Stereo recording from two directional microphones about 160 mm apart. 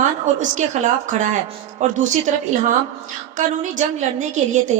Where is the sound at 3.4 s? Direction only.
50° right (ahead or behind).